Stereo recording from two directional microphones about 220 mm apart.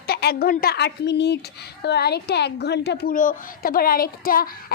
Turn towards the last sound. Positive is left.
turn(degrees=40)  # may be behind; listen again after turning